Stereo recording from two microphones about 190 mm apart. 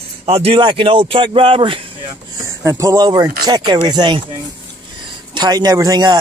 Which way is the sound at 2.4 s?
15° right (ahead or behind).